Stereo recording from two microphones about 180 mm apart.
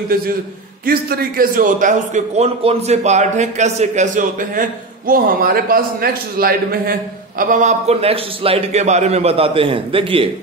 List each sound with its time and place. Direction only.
0.8 s a man's voice: 55° right (ahead or behind); by 10.2 s 30° right (ahead or behind)